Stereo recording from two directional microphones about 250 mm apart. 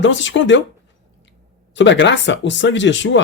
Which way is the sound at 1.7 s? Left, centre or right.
Left.